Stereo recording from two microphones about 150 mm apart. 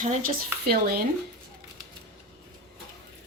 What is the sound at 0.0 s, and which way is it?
Speech, 70° right (ahead or behind).